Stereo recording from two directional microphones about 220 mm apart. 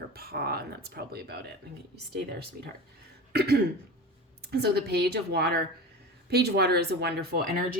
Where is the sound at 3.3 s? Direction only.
45° right (ahead or behind).